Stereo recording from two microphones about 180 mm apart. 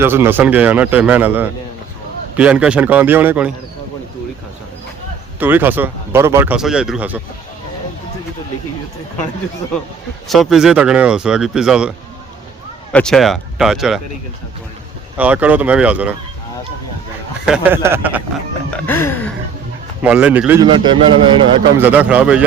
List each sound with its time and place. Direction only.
0.0 s speech: 15° right (ahead or behind)
5.4 s speech: 10° right (ahead or behind)
10.2 s speech: centre (ahead or behind)
15.2 s speech: 10° right (ahead or behind)
17.4 s speech: 5° right (ahead or behind)
18.7 s music: 10° left (ahead or behind)
20.0 s speech: 5° right (ahead or behind)
20.6 s a man's voice: 25° right (ahead or behind)
21.8 s speech: 10° right (ahead or behind)